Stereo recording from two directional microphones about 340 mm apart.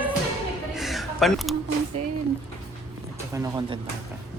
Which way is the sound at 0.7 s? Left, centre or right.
Centre.